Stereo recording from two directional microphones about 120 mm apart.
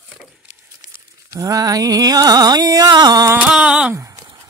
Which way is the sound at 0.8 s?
30° right (ahead or behind).